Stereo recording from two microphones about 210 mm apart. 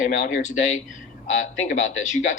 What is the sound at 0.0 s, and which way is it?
Speech, 35° left (ahead or behind).